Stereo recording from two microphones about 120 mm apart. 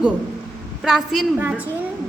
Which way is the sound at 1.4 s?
15° right (ahead or behind).